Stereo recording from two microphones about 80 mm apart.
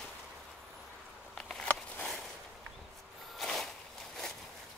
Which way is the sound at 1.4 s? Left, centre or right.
Centre.